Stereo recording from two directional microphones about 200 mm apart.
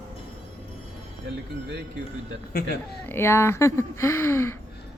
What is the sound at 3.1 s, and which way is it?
A woman's voice, 10° left (ahead or behind).